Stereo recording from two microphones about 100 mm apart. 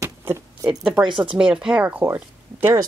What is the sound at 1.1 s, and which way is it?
Speech, 55° right (ahead or behind).